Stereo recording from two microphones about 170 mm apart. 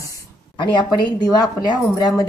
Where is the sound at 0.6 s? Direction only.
25° left (ahead or behind).